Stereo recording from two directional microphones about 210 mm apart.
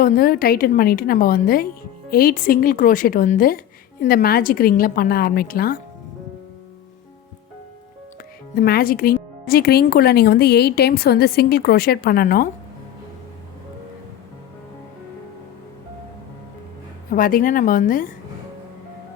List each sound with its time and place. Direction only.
0.0 s speech: 45° left (ahead or behind)
8.5 s speech: 45° left (ahead or behind)
17.1 s speech: 40° left (ahead or behind)